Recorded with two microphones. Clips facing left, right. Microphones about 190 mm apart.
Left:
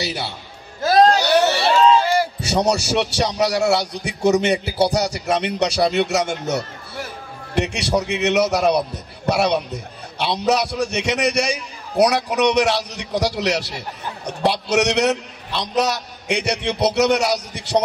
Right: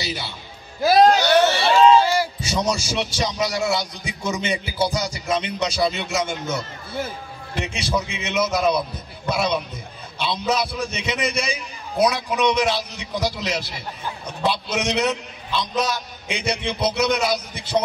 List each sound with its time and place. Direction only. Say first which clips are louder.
0.0 s a man's voice: left 4 dB; 70° left (ahead or behind)
0.8 s music: even; 5° right (ahead or behind)
2.0 s a man's voice: left 2 dB; 60° left (ahead or behind)